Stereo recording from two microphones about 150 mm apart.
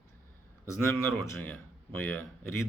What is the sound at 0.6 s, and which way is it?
Speech, 15° left (ahead or behind).